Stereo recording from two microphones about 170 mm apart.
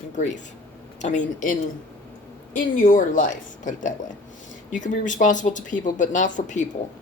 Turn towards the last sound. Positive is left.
turn(degrees=45)  # may be behind; listen again after turning